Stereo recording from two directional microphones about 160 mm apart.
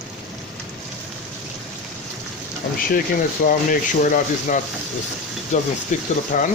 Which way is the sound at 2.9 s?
60° left (ahead or behind).